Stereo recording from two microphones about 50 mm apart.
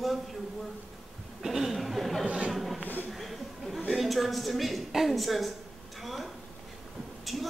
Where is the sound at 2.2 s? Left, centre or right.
Right.